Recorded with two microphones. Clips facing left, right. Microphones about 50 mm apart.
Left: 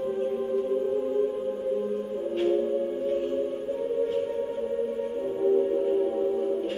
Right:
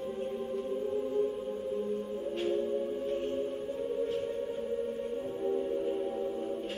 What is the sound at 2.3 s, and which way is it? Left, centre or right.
Music, centre.